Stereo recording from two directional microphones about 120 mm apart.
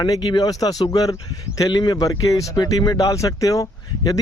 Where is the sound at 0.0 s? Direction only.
35° left (ahead or behind).